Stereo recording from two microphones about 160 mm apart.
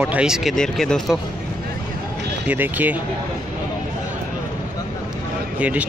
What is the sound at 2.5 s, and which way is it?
Speech, 10° right (ahead or behind).